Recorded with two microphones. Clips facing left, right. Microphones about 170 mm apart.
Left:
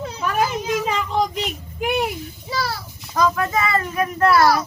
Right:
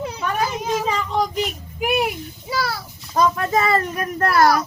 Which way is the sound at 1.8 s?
5° right (ahead or behind).